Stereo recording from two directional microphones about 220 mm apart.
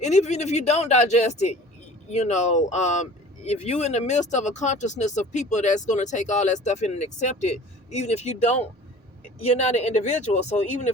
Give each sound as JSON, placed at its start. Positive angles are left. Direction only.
{"t": 0.0, "sound": "speech", "side_deg": 30}